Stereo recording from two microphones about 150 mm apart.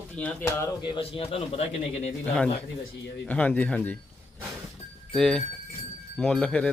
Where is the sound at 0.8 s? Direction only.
35° left (ahead or behind).